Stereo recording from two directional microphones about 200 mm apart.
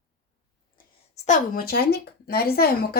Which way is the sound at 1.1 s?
35° left (ahead or behind).